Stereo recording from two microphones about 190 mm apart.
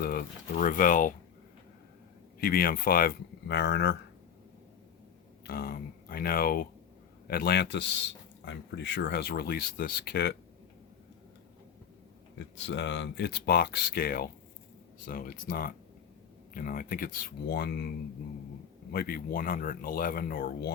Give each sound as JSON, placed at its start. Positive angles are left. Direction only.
{"t": 0.0, "sound": "speech", "side_deg": 50}
{"t": 2.4, "sound": "speech", "side_deg": 50}
{"t": 5.5, "sound": "speech", "side_deg": 50}
{"t": 12.5, "sound": "speech", "side_deg": 70}
{"t": 18.9, "sound": "speech", "side_deg": 55}